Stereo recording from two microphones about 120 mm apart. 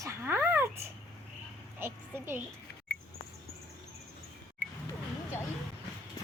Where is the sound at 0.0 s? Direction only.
20° right (ahead or behind).